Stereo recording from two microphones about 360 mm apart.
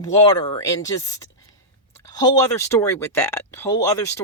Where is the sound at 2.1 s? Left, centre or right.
Centre.